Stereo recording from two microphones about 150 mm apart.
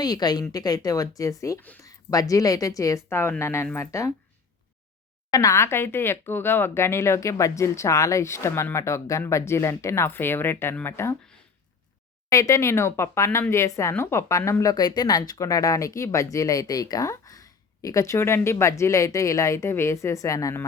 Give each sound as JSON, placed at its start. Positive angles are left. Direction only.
{"t": 0.0, "sound": "speech", "side_deg": 25}
{"t": 1.9, "sound": "speech", "side_deg": 25}
{"t": 5.3, "sound": "speech", "side_deg": 20}
{"t": 12.3, "sound": "speech", "side_deg": 20}